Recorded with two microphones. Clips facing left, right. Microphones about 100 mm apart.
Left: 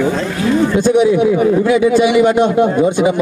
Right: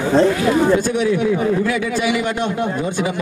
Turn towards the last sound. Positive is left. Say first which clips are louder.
# left 8 dB
turn(degrees=20)  # may be behind; listen again after turning